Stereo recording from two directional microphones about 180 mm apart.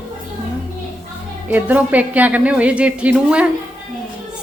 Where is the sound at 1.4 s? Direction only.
10° right (ahead or behind).